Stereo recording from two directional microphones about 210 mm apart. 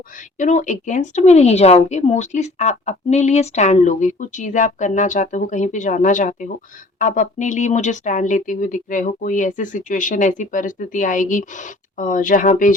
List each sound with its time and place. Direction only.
0.2 s a woman's voice: 35° left (ahead or behind)